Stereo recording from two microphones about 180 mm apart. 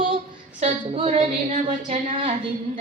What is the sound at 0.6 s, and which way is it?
A woman's voice, 35° right (ahead or behind).